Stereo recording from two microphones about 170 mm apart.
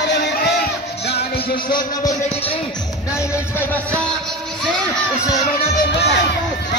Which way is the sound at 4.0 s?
5° left (ahead or behind).